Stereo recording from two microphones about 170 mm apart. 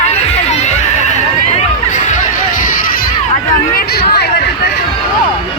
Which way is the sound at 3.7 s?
70° left (ahead or behind).